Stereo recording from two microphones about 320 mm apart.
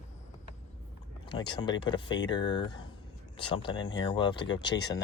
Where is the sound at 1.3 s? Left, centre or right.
Centre.